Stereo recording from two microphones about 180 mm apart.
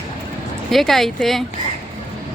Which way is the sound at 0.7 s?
Centre (ahead or behind).